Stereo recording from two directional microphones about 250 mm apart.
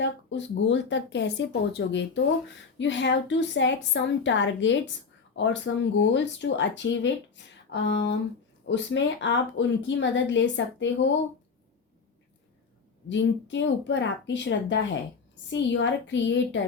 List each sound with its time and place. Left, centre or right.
0.0 s speech: left
13.1 s speech: left